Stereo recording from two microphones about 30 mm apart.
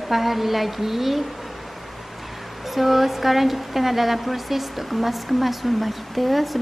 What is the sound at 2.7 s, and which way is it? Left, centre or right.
Speech, centre.